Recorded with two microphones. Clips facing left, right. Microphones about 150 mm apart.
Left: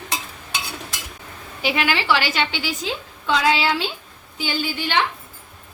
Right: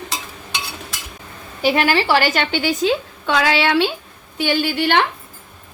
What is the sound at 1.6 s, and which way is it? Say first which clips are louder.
A woman's voice: right 5 dB; 40° right (ahead or behind).